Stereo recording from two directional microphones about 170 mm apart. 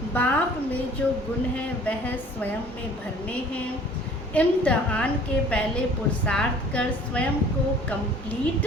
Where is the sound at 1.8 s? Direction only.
10° left (ahead or behind).